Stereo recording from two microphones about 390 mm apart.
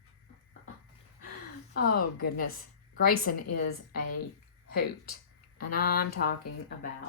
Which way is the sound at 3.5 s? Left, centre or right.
Left.